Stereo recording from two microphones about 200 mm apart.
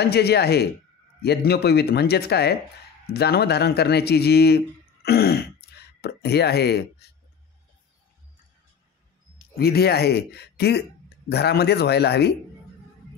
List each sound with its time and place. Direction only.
0.0 s a man's voice: 55° left (ahead or behind)
9.6 s speech: 55° left (ahead or behind)